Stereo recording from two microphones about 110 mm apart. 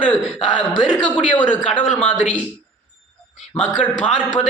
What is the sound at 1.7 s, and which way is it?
Speech, 15° left (ahead or behind).